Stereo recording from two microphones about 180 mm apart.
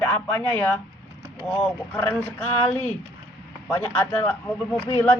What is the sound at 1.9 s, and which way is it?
Speech, 10° left (ahead or behind).